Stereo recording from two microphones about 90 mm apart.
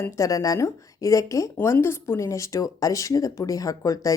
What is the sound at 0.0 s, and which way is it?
Speech, 40° left (ahead or behind).